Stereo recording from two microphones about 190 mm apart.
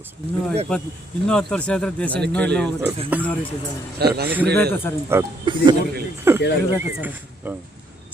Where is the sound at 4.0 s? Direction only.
55° right (ahead or behind).